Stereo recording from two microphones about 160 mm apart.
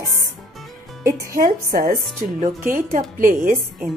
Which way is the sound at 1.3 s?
60° right (ahead or behind).